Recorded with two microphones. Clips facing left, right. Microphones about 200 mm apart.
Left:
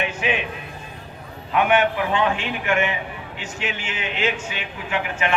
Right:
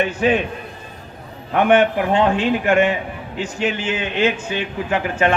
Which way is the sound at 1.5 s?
45° right (ahead or behind).